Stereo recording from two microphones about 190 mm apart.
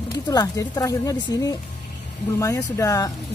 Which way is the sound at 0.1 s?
20° left (ahead or behind).